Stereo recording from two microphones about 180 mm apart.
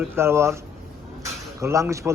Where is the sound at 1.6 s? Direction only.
15° right (ahead or behind).